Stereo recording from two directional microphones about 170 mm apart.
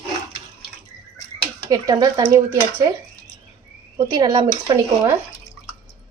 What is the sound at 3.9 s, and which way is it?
Speech, 20° right (ahead or behind).